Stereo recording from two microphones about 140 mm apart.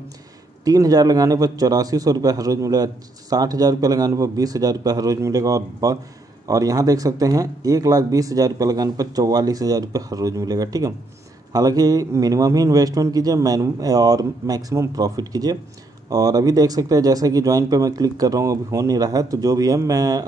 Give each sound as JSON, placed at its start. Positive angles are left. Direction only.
{"t": 0.7, "sound": "a man's voice", "side_deg": -25}